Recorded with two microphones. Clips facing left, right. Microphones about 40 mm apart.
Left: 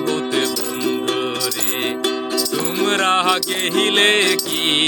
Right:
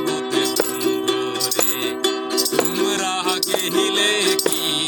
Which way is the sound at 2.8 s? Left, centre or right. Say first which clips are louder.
Left 5 dB; left.